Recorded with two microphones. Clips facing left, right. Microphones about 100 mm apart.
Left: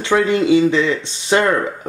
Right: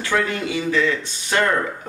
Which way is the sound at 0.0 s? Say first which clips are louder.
Left 7 dB; 25° left (ahead or behind).